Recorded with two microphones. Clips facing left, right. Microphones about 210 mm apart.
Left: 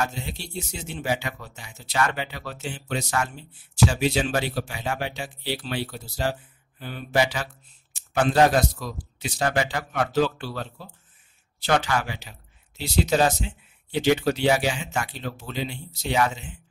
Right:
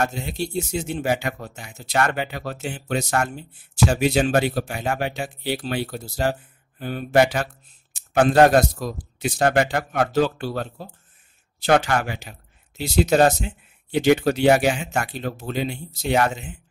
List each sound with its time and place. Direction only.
0.0 s speech: 50° right (ahead or behind)